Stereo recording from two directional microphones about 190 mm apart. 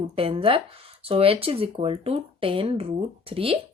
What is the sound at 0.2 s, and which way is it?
Speech, 30° right (ahead or behind).